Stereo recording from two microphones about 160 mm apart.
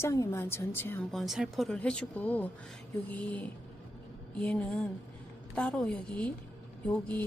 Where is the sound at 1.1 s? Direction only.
Centre (ahead or behind).